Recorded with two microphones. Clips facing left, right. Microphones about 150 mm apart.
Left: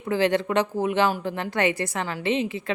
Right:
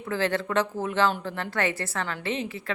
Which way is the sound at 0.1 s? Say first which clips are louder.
Left 4 dB; 15° left (ahead or behind).